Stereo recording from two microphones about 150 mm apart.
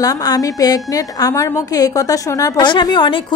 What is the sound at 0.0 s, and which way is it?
A woman's voice, 25° left (ahead or behind).